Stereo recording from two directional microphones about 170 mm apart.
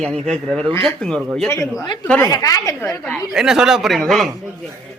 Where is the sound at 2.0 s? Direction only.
15° left (ahead or behind).